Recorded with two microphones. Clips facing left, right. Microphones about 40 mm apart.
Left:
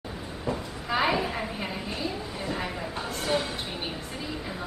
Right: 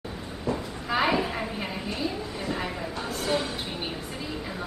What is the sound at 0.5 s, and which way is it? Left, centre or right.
Train, centre.